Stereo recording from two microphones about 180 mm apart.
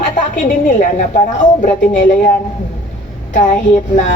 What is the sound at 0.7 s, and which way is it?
A woman's voice, 45° left (ahead or behind).